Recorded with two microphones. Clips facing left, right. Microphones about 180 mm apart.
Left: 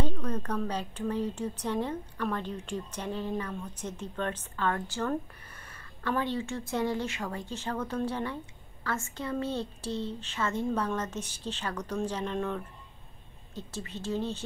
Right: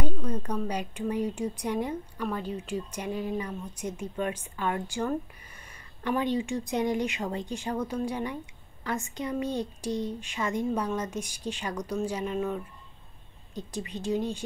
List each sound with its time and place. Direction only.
0.0 s a woman's voice: 10° right (ahead or behind)